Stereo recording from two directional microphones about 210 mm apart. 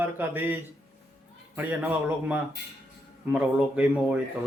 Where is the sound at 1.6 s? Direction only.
10° right (ahead or behind).